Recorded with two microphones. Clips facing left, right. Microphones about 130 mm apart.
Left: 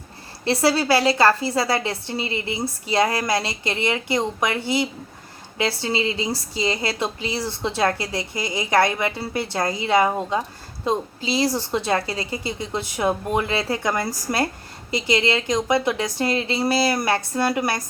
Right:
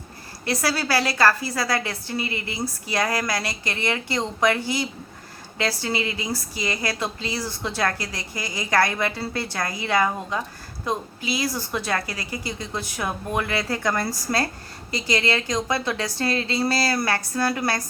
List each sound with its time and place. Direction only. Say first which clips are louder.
0.4 s a woman's voice: left 5 dB; 25° left (ahead or behind)